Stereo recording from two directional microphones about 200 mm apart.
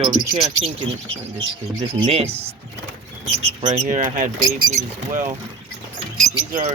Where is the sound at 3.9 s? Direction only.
40° right (ahead or behind).